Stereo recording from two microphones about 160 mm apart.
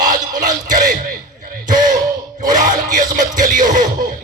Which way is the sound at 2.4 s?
55° right (ahead or behind).